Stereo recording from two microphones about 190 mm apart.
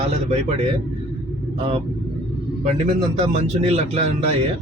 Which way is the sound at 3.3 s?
35° right (ahead or behind).